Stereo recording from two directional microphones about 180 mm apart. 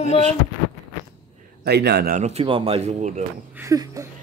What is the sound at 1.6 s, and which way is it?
Speech, 65° right (ahead or behind).